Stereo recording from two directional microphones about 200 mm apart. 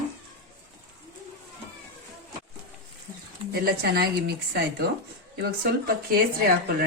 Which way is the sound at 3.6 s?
50° right (ahead or behind).